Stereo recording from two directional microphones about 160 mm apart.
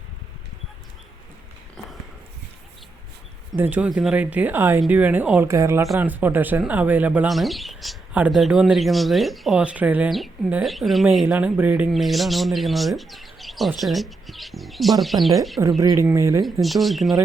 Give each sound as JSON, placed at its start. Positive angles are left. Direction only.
{"t": 3.5, "sound": "speech", "side_deg": -10}
{"t": 11.9, "sound": "speech", "side_deg": 0}
{"t": 15.8, "sound": "speech", "side_deg": -20}
{"t": 16.4, "sound": "speech", "side_deg": 0}